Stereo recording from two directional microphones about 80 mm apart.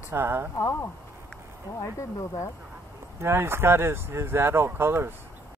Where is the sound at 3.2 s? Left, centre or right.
Right.